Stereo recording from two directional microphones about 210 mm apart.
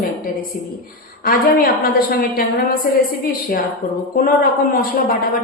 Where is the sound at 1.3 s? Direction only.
45° left (ahead or behind).